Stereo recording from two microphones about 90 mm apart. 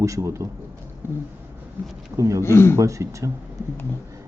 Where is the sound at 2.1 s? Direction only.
35° right (ahead or behind).